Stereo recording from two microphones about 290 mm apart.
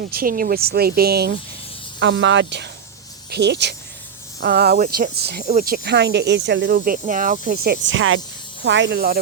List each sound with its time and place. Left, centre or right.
0.0 s speech: right